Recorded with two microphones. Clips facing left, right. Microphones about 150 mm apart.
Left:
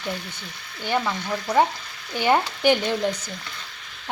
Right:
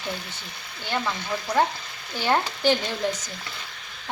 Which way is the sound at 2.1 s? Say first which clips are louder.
Left 3 dB; 15° left (ahead or behind).